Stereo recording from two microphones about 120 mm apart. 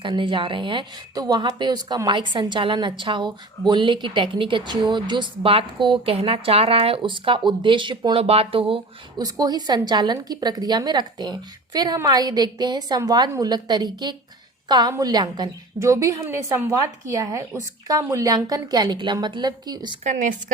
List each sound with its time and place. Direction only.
0.0 s speech: 40° right (ahead or behind)
9.1 s speech: 30° right (ahead or behind)
20.1 s a woman's voice: 90° right